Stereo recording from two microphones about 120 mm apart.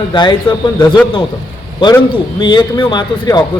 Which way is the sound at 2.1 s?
40° left (ahead or behind).